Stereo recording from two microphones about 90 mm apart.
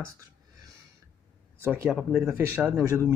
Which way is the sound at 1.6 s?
25° right (ahead or behind).